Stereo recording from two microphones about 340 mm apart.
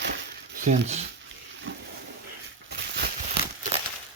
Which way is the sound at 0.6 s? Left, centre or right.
Centre.